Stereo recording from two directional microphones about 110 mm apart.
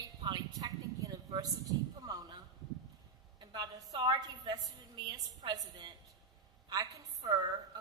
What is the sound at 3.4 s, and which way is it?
A woman's voice, 40° right (ahead or behind).